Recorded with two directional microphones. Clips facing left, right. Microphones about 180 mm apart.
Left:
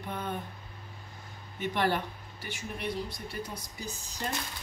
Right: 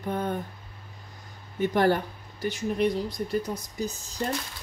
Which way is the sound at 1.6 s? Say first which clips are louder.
Right 7 dB; 45° right (ahead or behind).